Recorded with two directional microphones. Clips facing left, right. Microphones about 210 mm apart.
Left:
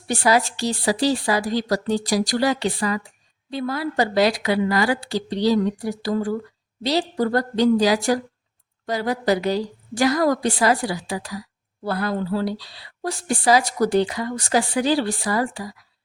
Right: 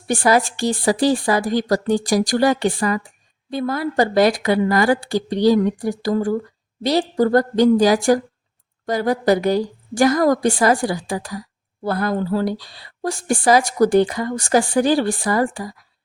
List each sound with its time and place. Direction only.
0.1 s a woman's voice: 50° right (ahead or behind)